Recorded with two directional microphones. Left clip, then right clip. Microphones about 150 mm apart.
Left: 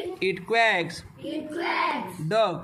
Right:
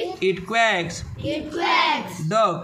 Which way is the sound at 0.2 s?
25° left (ahead or behind).